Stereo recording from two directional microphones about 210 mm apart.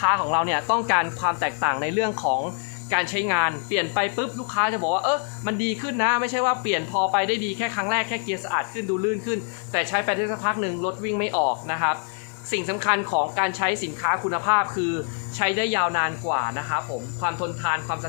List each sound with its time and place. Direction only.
0.0 s speech: 10° right (ahead or behind)
2.9 s speech: 15° right (ahead or behind)
9.7 s speech: 15° right (ahead or behind)